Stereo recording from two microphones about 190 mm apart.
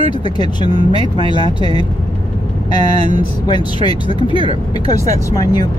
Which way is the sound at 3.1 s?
25° left (ahead or behind).